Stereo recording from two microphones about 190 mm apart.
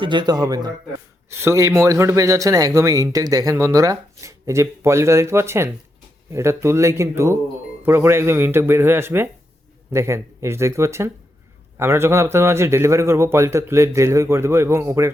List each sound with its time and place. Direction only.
0.0 s a man's voice: 25° right (ahead or behind)